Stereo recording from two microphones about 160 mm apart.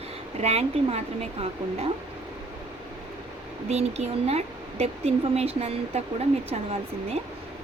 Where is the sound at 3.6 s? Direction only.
45° right (ahead or behind).